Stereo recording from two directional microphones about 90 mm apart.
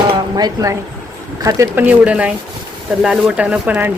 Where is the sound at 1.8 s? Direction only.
15° right (ahead or behind).